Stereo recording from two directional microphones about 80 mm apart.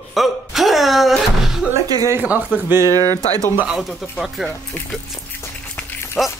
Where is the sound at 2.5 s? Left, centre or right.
Right.